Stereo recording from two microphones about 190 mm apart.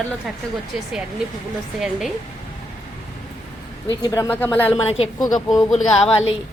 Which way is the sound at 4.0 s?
15° left (ahead or behind).